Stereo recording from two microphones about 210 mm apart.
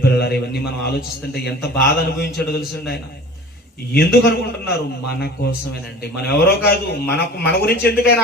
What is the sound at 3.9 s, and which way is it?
A man's voice, 50° left (ahead or behind).